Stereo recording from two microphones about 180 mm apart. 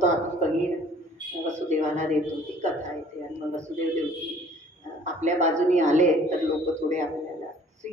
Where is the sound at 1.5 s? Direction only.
40° right (ahead or behind).